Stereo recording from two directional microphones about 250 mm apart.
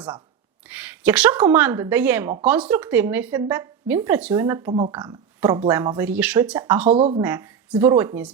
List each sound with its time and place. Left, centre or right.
0.7 s a woman's voice: centre
6.9 s speech: right
7.3 s a woman's voice: centre